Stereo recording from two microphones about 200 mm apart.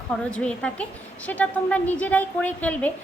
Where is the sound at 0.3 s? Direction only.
5° left (ahead or behind).